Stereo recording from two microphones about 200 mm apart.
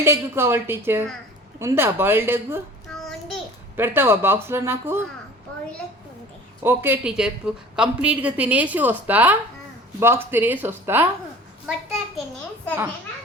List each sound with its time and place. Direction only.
0.0 s a woman's voice: 15° right (ahead or behind)
2.9 s child singing: centre (ahead or behind)
3.8 s a woman's voice: 10° right (ahead or behind)
6.6 s a woman's voice: 10° right (ahead or behind)